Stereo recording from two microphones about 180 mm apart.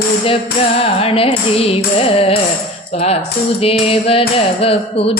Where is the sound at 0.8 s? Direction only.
30° left (ahead or behind).